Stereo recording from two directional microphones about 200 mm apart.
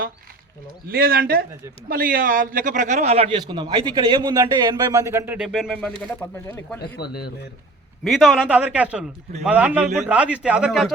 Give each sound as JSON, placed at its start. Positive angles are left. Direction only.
{"t": 0.9, "sound": "a man's voice", "side_deg": -50}
{"t": 6.8, "sound": "speech", "side_deg": 55}
{"t": 8.0, "sound": "a man's voice", "side_deg": 0}